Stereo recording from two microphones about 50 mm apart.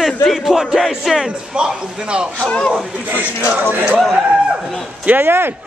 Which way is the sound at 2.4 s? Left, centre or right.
Centre.